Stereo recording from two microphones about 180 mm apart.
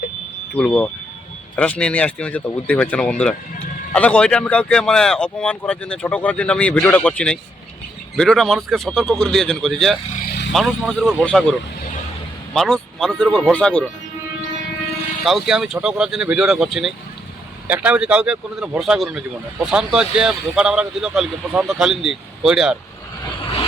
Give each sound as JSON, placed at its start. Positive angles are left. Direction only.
{"t": 0.5, "sound": "speech", "side_deg": 5}
{"t": 10.2, "sound": "vehicle", "side_deg": 65}
{"t": 10.5, "sound": "speech", "side_deg": 0}
{"t": 12.5, "sound": "speech", "side_deg": 5}
{"t": 15.2, "sound": "speech", "side_deg": 0}